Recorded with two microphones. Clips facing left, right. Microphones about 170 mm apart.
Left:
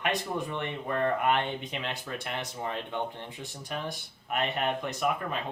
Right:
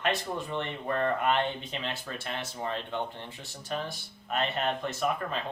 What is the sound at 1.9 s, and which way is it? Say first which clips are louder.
Speech: left 1 dB; 15° left (ahead or behind).